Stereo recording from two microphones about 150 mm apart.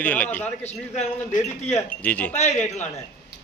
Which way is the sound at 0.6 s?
50° left (ahead or behind).